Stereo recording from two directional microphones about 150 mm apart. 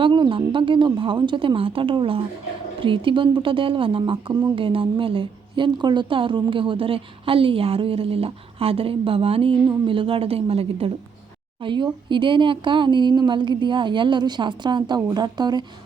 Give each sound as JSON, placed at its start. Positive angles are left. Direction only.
{"t": 0.0, "sound": "a woman's voice", "side_deg": -35}